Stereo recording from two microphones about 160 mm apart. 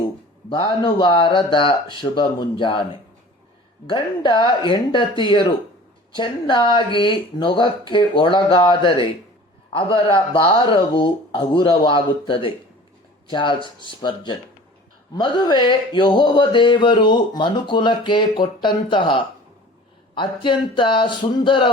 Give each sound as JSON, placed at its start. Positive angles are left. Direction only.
{"t": 0.5, "sound": "speech", "side_deg": 35}
{"t": 3.8, "sound": "speech", "side_deg": 30}
{"t": 13.6, "sound": "speech", "side_deg": -30}
{"t": 14.0, "sound": "speech", "side_deg": 30}